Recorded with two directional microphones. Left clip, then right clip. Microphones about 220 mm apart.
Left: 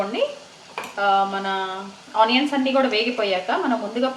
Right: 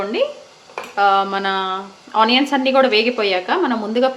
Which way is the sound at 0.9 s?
50° right (ahead or behind).